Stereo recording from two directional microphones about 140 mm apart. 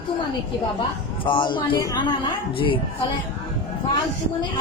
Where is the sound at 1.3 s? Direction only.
35° left (ahead or behind).